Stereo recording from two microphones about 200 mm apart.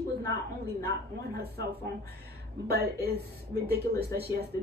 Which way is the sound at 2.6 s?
50° right (ahead or behind).